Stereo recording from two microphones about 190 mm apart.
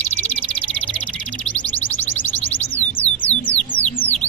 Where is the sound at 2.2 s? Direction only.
10° left (ahead or behind).